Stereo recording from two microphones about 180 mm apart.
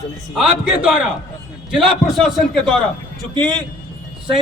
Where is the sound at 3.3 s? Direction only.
25° right (ahead or behind).